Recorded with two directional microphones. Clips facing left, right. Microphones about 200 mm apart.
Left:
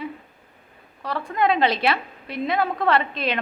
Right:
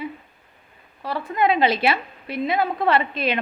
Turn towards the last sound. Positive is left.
turn(degrees=-5)  # may be behind; listen again after turning